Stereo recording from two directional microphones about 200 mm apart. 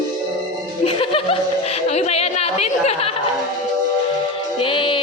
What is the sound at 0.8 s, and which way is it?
Speech, 25° left (ahead or behind).